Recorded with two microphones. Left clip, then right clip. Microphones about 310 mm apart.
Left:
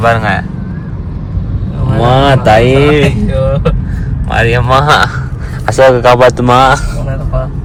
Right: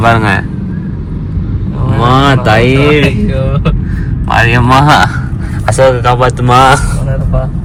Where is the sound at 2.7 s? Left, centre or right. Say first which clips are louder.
Left 1 dB; centre.